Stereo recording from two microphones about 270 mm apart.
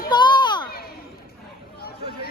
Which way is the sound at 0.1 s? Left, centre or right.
Centre.